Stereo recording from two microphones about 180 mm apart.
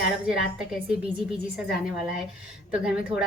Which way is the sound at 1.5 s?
Centre (ahead or behind).